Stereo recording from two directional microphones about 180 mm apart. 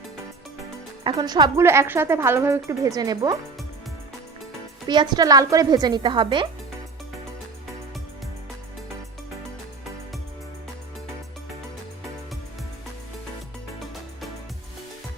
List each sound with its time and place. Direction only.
1.0 s speech: 25° right (ahead or behind)
4.9 s speech: 25° right (ahead or behind)